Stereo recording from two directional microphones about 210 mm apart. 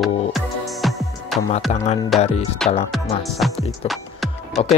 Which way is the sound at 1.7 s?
30° left (ahead or behind).